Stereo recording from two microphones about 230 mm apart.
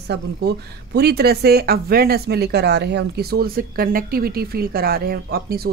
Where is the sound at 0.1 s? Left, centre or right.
Right.